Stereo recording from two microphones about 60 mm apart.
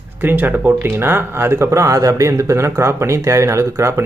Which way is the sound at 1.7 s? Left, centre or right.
Right.